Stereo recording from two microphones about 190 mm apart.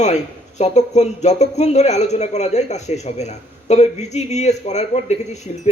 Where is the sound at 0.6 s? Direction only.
35° left (ahead or behind).